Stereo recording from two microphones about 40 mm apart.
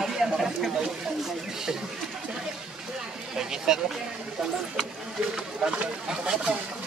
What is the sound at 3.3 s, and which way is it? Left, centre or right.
Speech, centre.